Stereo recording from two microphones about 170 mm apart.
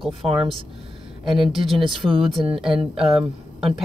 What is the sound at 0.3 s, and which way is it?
Speech, 30° right (ahead or behind).